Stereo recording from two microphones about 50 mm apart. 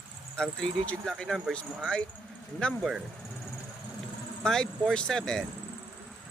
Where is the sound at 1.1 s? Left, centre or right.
Centre.